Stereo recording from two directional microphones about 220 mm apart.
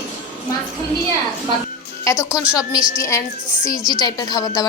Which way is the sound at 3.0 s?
15° left (ahead or behind).